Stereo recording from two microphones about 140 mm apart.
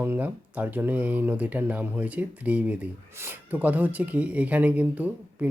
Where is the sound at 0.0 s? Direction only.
15° right (ahead or behind).